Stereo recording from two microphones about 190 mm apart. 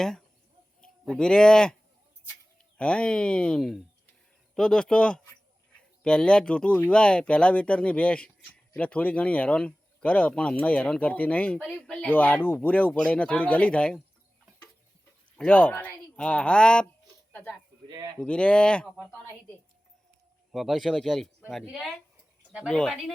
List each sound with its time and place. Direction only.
0.8 s speech: 5° left (ahead or behind)
2.7 s speech: 5° left (ahead or behind)
15.4 s speech: 5° left (ahead or behind)
17.8 s speech: 20° right (ahead or behind)
18.2 s speech: 5° left (ahead or behind)
20.5 s speech: centre (ahead or behind)